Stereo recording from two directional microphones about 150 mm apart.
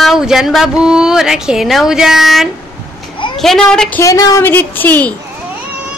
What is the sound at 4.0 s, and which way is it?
A woman's voice, 25° left (ahead or behind).